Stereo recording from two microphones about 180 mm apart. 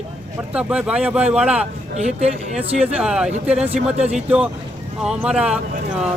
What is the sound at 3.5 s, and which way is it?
Speech, 35° right (ahead or behind).